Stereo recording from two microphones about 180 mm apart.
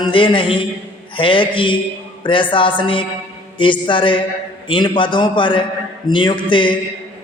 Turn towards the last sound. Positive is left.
turn(degrees=25)  # may be behind; listen again after turning